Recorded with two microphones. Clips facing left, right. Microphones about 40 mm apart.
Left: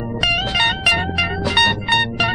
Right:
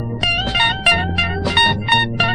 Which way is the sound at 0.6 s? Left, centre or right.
Right.